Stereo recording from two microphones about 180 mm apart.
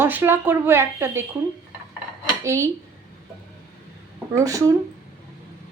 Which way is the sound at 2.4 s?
15° right (ahead or behind).